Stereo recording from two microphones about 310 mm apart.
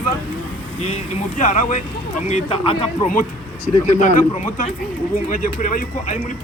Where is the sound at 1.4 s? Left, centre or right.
Left.